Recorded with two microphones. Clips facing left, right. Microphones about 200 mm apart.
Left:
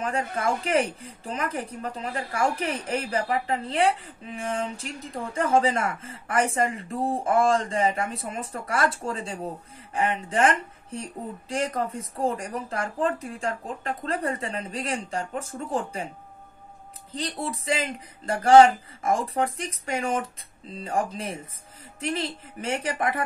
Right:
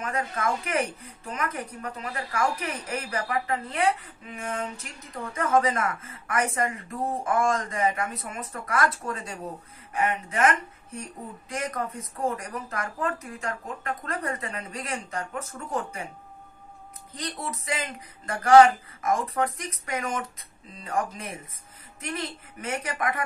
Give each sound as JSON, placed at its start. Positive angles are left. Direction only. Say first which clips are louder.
{"t": 0.4, "sound": "speech", "louder": "left 4 dB", "side_deg": 30}
{"t": 17.1, "sound": "speech", "louder": "left 4 dB", "side_deg": 30}